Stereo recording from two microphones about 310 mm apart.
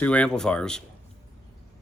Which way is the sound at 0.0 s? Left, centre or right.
Centre.